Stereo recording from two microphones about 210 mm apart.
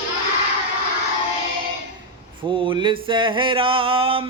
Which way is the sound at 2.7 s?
20° right (ahead or behind).